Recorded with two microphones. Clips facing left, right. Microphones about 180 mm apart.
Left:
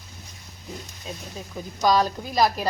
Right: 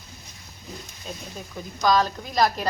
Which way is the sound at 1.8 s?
10° left (ahead or behind).